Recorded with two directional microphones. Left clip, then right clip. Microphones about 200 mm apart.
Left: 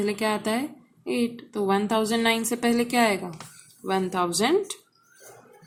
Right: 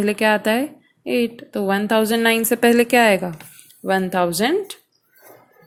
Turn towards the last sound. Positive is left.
turn(degrees=-25)  # may be behind; listen again after turning